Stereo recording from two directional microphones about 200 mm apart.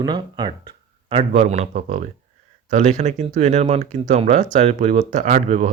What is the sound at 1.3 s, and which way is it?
Speech, 35° right (ahead or behind).